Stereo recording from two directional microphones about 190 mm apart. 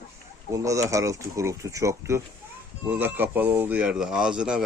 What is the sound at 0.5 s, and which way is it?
Speech, 15° right (ahead or behind).